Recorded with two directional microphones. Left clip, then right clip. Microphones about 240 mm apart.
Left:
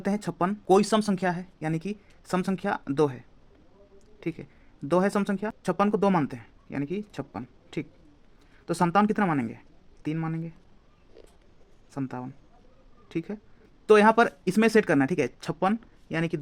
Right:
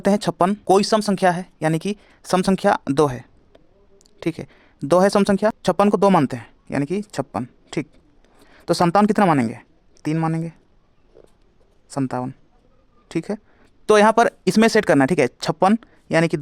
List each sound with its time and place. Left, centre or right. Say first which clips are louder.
0.0 s speech: right 10 dB; right
11.9 s a woman's voice: right 10 dB; right